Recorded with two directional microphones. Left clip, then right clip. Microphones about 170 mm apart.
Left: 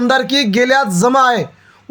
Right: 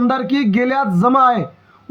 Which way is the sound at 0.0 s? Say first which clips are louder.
Left 4 dB; 35° left (ahead or behind).